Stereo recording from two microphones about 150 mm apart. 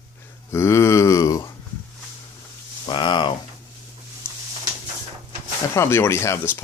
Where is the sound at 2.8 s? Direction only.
30° left (ahead or behind).